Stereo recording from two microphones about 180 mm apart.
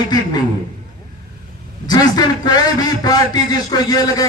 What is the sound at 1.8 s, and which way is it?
A man's voice, 20° left (ahead or behind).